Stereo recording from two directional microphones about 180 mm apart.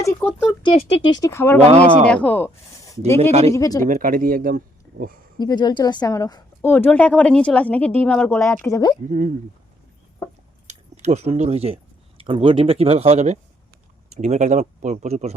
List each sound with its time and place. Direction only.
0.0 s a woman's voice: 15° left (ahead or behind)
0.6 s speech: 30° left (ahead or behind)
1.2 s a woman's voice: 15° left (ahead or behind)
1.7 s speech: 40° right (ahead or behind)
2.0 s a woman's voice: 10° left (ahead or behind)
3.8 s speech: 50° right (ahead or behind)
5.4 s a woman's voice: 20° left (ahead or behind)
9.0 s speech: 45° right (ahead or behind)
10.7 s speech: 40° right (ahead or behind)